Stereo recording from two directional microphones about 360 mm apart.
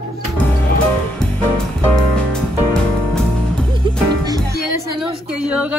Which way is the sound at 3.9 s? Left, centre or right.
Centre.